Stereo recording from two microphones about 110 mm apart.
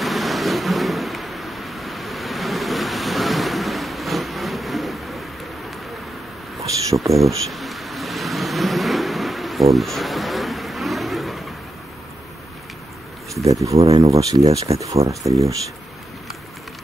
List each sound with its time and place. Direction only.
0.0 s vehicle: centre (ahead or behind)
6.9 s a sound: 30° right (ahead or behind)
7.2 s vehicle: centre (ahead or behind)
13.3 s speech: 30° right (ahead or behind)